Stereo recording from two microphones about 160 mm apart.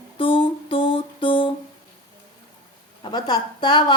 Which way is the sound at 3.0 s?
25° left (ahead or behind).